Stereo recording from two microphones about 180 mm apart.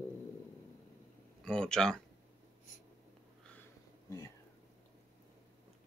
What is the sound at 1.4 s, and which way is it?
Speech, 5° left (ahead or behind).